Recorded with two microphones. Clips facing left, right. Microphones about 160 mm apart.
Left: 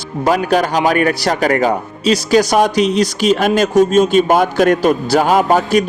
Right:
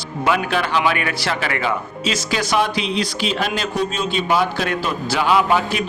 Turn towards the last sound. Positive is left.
turn(degrees=45)  # may be behind; listen again after turning